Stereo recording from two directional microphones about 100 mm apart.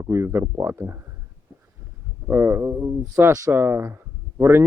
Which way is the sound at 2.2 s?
20° right (ahead or behind).